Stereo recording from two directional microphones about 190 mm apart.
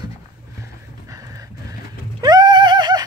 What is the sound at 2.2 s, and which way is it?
Neigh, 20° right (ahead or behind).